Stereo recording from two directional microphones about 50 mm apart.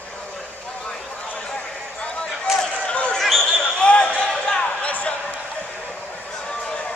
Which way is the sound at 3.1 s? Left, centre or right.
Centre.